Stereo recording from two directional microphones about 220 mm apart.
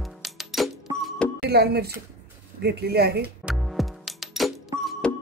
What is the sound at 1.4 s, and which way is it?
Speech, 45° right (ahead or behind).